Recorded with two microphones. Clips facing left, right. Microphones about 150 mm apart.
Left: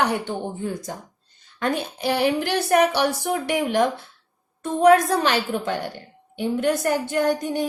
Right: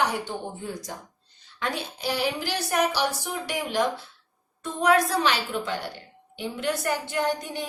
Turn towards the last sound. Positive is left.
turn(degrees=45)  # may be behind; listen again after turning